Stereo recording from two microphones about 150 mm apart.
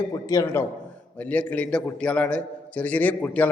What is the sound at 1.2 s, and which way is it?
A man's voice, 10° left (ahead or behind).